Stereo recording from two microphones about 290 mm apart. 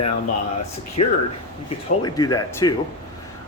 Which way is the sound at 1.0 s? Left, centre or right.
Left.